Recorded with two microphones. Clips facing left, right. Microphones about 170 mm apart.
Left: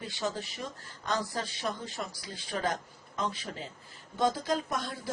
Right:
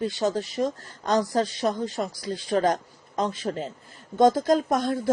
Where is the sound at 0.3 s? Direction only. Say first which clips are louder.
Right 13 dB; 50° right (ahead or behind).